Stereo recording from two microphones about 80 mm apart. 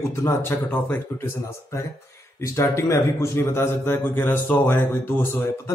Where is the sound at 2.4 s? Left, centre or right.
Left.